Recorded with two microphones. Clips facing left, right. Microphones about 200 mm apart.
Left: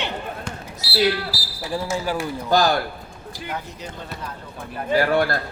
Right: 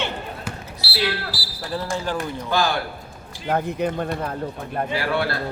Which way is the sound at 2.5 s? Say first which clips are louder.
Left 4 dB; 40° left (ahead or behind).